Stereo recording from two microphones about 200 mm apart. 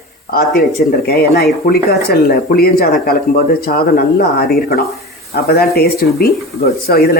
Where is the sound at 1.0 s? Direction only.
50° left (ahead or behind).